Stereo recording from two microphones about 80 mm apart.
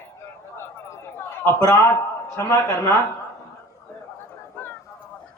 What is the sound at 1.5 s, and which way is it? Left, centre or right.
Speech, left.